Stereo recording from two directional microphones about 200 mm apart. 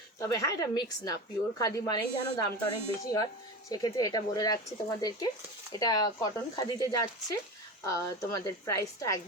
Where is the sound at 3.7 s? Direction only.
20° left (ahead or behind).